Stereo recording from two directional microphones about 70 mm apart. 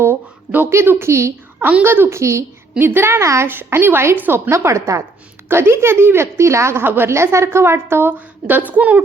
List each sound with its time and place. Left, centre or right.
0.7 s a woman's voice: right
1.5 s a woman's voice: centre
1.8 s a woman's voice: right
2.7 s a woman's voice: right
3.4 s a woman's voice: right
4.5 s a woman's voice: right
5.5 s a woman's voice: right